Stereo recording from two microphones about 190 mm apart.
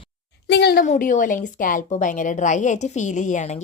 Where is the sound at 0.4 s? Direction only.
60° left (ahead or behind).